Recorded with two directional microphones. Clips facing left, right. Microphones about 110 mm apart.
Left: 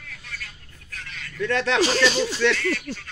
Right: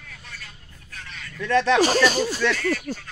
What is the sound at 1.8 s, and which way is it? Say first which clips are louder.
Speech: right 1 dB; 45° right (ahead or behind).